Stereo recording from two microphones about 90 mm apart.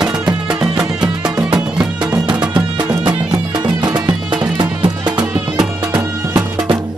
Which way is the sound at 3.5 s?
55° right (ahead or behind).